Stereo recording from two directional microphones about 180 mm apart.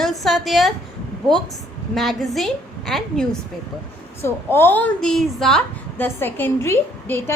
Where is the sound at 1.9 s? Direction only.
Centre (ahead or behind).